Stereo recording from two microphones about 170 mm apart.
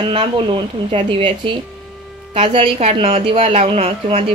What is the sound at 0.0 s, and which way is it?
A woman's voice, 30° right (ahead or behind).